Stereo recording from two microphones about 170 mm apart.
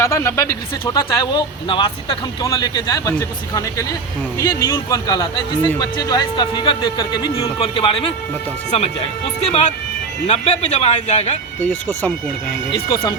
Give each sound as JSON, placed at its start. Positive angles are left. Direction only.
{"t": 0.0, "sound": "speech", "side_deg": 15}
{"t": 9.4, "sound": "speech", "side_deg": 40}
{"t": 11.6, "sound": "speech", "side_deg": 10}
{"t": 12.7, "sound": "speech", "side_deg": 30}